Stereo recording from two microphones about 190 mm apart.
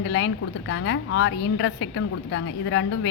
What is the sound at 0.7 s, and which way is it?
A woman's voice, 85° left.